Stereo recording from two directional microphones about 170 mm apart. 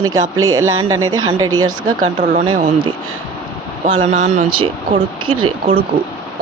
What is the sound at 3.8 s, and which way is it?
Speech, 45° right (ahead or behind).